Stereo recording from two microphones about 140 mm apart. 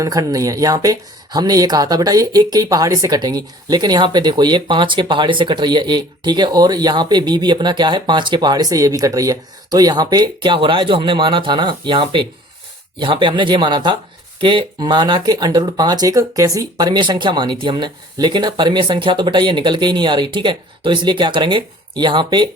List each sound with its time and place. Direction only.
0.0 s speech: 25° right (ahead or behind)